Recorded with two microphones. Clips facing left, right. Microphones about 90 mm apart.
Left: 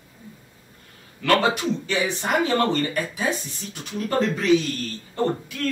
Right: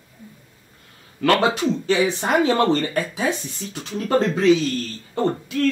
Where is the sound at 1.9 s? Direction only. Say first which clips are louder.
Right 5 dB; 25° right (ahead or behind).